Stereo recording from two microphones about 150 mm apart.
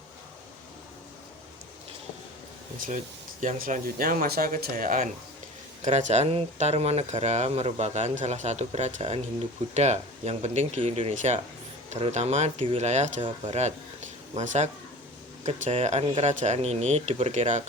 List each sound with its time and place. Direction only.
3.4 s speech: 65° right (ahead or behind)
5.8 s speech: 50° right (ahead or behind)